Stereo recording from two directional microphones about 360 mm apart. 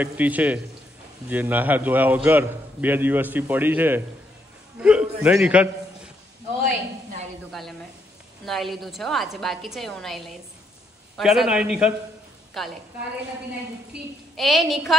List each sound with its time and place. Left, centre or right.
0.0 s a man's voice: centre
6.6 s a sound: right
8.5 s a man's voice: centre
13.9 s a man's voice: centre